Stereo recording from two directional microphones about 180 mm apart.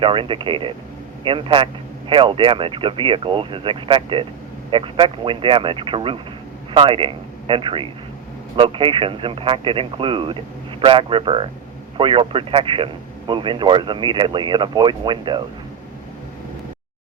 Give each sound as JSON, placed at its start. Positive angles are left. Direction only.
{"t": 0.0, "sound": "a man's voice", "side_deg": -30}